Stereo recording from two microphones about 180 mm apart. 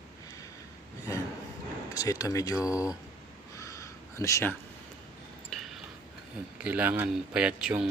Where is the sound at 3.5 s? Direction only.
15° left (ahead or behind).